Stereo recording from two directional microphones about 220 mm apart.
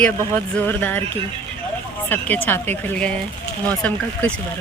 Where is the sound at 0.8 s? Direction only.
5° left (ahead or behind).